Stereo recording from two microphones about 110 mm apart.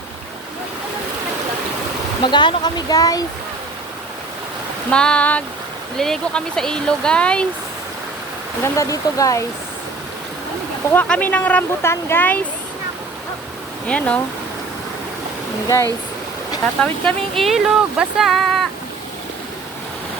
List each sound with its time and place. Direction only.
2.2 s speech: 45° left (ahead or behind)
4.9 s speech: 10° left (ahead or behind)
8.6 s speech: 30° left (ahead or behind)
10.9 s speech: 15° left (ahead or behind)
11.8 s speech: 25° left (ahead or behind)
13.8 s speech: 10° left (ahead or behind)
15.6 s speech: 30° left (ahead or behind)
16.8 s speech: 10° left (ahead or behind)
17.4 s speech: centre (ahead or behind)